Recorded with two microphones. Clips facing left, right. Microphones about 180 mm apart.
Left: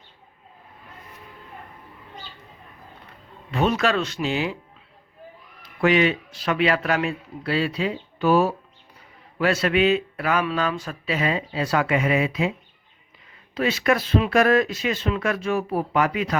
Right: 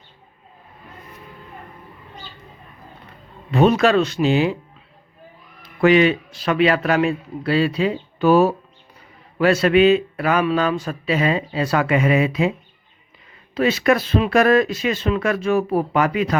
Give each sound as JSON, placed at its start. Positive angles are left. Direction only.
{"t": 3.7, "sound": "speech", "side_deg": -25}
{"t": 5.8, "sound": "a man's voice", "side_deg": -35}
{"t": 9.4, "sound": "a man's voice", "side_deg": -30}
{"t": 11.6, "sound": "speech", "side_deg": -55}
{"t": 13.6, "sound": "a man's voice", "side_deg": -30}